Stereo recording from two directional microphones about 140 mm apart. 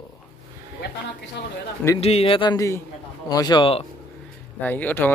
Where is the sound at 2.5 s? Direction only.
20° left (ahead or behind); by 3.8 s 40° left (ahead or behind).